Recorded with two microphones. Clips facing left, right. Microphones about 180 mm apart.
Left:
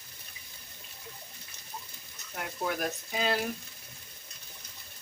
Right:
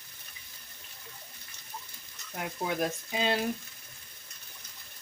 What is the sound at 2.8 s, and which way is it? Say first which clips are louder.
Speech: right 2 dB; 25° right (ahead or behind).